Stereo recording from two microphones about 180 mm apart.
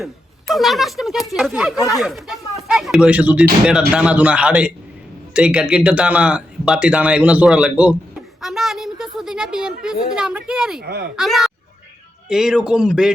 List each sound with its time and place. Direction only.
0.0 s speech: centre (ahead or behind)
10.8 s speech: 60° right (ahead or behind)
11.2 s speech: centre (ahead or behind)